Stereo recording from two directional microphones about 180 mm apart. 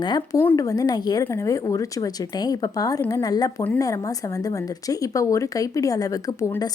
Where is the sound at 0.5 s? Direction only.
20° left (ahead or behind).